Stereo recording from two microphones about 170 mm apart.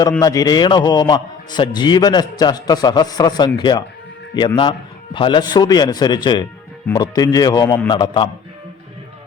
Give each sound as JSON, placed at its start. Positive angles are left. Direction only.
{"t": 0.2, "sound": "a man's voice", "side_deg": 20}